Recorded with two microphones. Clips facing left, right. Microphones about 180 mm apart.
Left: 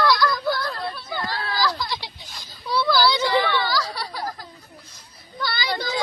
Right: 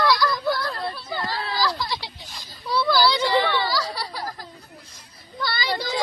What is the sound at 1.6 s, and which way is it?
Children playing, centre (ahead or behind).